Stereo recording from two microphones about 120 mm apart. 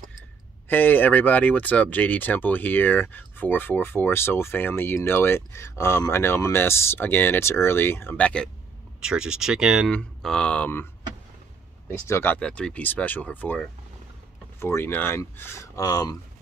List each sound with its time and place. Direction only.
0.7 s speech: 15° left (ahead or behind)
9.0 s speech: 5° right (ahead or behind)
9.8 s speech: 10° left (ahead or behind)
11.9 s speech: 20° left (ahead or behind)
12.4 s speech: 10° left (ahead or behind); by 16.2 s 30° left (ahead or behind)